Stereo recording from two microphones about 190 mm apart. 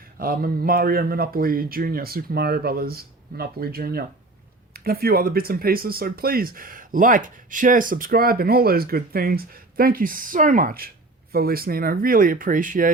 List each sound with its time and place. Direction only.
0.2 s speech: 50° right (ahead or behind)